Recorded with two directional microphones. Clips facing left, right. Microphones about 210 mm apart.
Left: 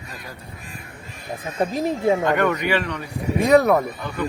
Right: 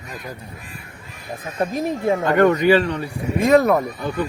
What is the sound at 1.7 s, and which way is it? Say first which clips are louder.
Speech: even; 15° right (ahead or behind).